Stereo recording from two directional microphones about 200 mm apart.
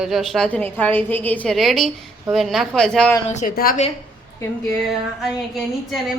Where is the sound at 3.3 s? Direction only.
40° left (ahead or behind).